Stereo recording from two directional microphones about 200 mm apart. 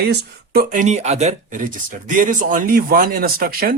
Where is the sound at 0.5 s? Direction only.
40° right (ahead or behind).